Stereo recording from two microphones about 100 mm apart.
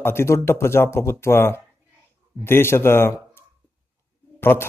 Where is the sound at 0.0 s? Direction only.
25° left (ahead or behind).